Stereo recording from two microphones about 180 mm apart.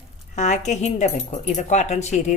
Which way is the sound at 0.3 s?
40° left (ahead or behind).